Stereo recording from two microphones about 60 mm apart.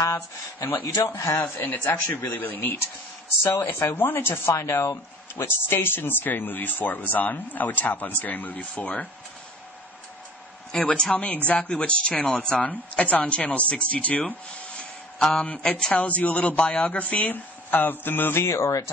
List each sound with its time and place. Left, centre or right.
0.0 s speech: left
0.7 s speech: left
1.0 s a man's voice: left
1.4 s speech: left
3.5 s speech: left
3.9 s speech: left
10.7 s speech: centre
14.8 s a sound: centre
15.4 s speech: left